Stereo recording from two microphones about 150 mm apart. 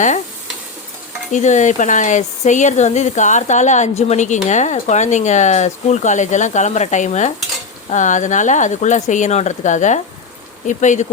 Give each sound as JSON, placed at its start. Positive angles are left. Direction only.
{"t": 1.3, "sound": "speech", "side_deg": 55}